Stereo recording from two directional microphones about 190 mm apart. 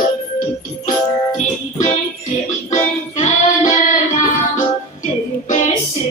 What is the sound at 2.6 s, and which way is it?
Music, 40° left (ahead or behind).